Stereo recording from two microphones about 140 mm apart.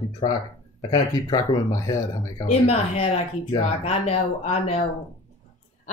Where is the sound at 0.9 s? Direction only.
30° left (ahead or behind).